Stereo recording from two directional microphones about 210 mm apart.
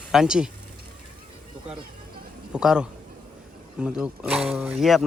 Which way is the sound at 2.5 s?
5° right (ahead or behind).